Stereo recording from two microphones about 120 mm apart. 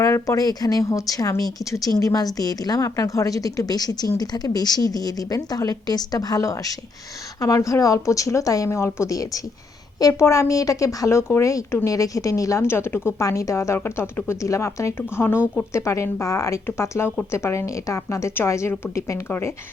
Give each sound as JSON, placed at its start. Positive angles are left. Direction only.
{"t": 0.0, "sound": "a woman's voice", "side_deg": 25}